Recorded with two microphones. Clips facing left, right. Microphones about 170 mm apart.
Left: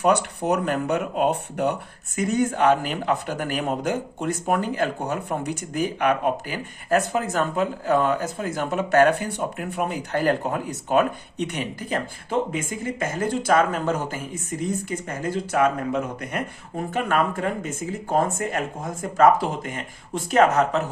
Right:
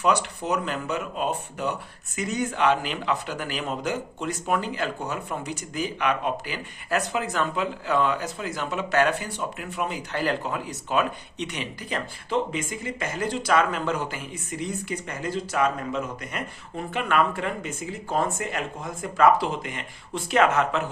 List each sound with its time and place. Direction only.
0.0 s speech: 55° left (ahead or behind); by 20.8 s 40° left (ahead or behind)